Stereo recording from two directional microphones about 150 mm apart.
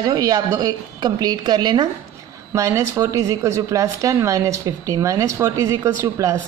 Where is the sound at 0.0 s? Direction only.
25° right (ahead or behind).